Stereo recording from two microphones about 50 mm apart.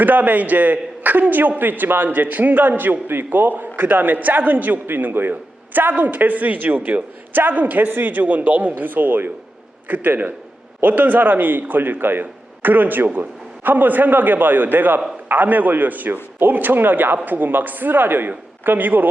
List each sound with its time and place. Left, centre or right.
0.0 s a man's voice: right